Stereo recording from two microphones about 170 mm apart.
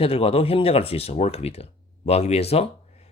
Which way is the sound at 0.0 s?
35° left (ahead or behind).